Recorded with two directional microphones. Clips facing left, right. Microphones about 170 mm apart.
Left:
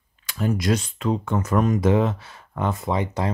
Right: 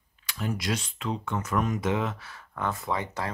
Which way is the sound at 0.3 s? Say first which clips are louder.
Left 8 dB; 45° left (ahead or behind).